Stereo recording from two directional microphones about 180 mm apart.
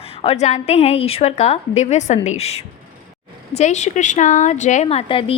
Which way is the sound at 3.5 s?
40° left (ahead or behind).